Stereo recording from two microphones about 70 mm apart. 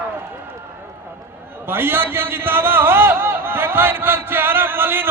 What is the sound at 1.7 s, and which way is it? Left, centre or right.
A man's voice, right.